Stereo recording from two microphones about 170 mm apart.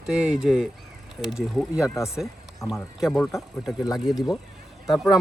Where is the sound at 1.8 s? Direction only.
20° left (ahead or behind).